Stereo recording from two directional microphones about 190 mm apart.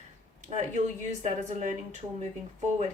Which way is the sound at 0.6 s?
40° right (ahead or behind).